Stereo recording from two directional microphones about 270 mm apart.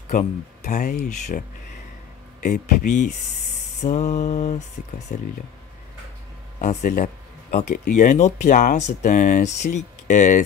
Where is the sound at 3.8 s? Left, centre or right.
Left.